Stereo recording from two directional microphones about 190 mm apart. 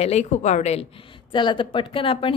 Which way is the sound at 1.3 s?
25° left (ahead or behind).